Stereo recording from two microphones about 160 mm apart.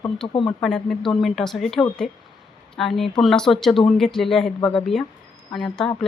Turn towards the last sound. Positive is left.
turn(degrees=5)  # may be behind; listen again after turning